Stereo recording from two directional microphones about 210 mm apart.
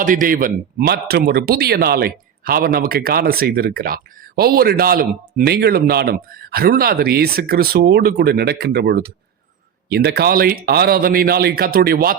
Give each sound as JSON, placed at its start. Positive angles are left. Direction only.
{"t": 0.0, "sound": "speech", "side_deg": -40}